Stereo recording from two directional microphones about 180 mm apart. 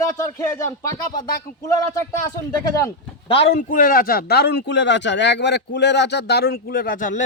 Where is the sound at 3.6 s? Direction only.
50° left (ahead or behind).